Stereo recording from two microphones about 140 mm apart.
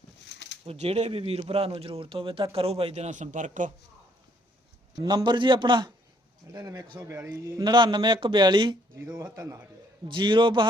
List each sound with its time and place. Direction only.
0.6 s speech: 45° right (ahead or behind); by 3.7 s 60° right (ahead or behind)
4.9 s a man's voice: 30° right (ahead or behind)
7.7 s a man's voice: 35° right (ahead or behind)
9.1 s a man's voice: 20° right (ahead or behind)
10.1 s a man's voice: 35° right (ahead or behind)